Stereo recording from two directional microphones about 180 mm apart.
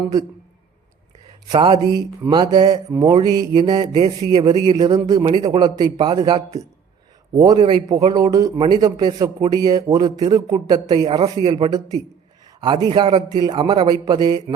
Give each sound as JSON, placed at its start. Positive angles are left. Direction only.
{"t": 1.5, "sound": "speech", "side_deg": -25}
{"t": 2.9, "sound": "a sound", "side_deg": -15}
{"t": 3.2, "sound": "speech", "side_deg": -25}
{"t": 11.0, "sound": "speech", "side_deg": -35}
{"t": 11.5, "sound": "speech", "side_deg": -20}